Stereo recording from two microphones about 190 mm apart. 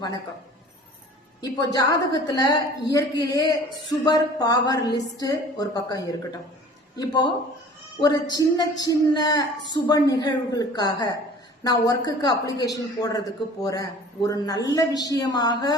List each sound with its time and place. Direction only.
1.4 s a woman's voice: 20° left (ahead or behind)